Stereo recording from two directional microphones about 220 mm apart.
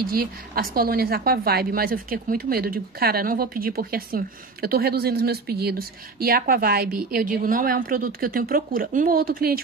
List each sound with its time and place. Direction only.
0.0 s a woman's voice: 40° right (ahead or behind)